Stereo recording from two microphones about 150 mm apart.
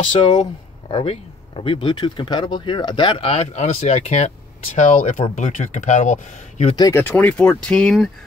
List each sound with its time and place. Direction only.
0.8 s speech: 40° left (ahead or behind); by 6.7 s 55° left (ahead or behind)
6.8 s speech: 15° left (ahead or behind)